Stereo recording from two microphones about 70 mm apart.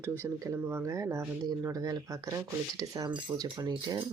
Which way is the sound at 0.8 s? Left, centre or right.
Right.